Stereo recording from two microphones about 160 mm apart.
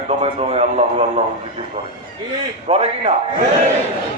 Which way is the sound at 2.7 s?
45° right (ahead or behind).